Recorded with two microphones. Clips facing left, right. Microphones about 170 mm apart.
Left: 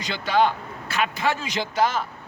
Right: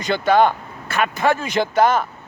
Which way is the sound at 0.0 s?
50° right (ahead or behind).